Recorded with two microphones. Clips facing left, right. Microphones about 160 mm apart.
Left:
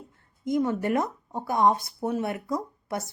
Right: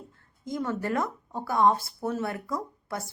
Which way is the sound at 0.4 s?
20° left (ahead or behind).